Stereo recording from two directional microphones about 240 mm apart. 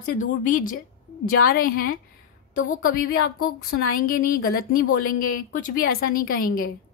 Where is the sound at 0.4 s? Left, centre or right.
Left.